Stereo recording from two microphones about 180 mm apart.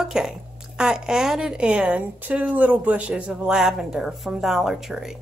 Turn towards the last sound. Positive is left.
turn(degrees=0)  # may be behind; listen again after turning